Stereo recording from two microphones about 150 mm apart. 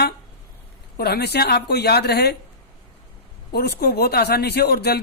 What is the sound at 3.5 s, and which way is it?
Speech, 90° left.